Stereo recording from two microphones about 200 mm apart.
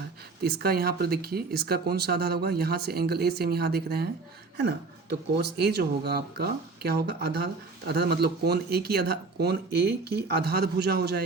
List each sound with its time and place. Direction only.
0.4 s speech: 50° right (ahead or behind)